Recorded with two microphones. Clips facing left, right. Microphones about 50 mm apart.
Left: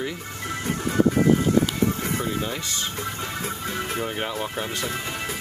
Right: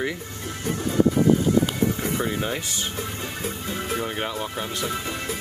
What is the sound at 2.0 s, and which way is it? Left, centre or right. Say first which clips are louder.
Speech: right 1 dB; left.